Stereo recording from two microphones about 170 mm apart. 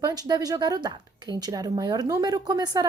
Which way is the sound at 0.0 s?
25° right (ahead or behind).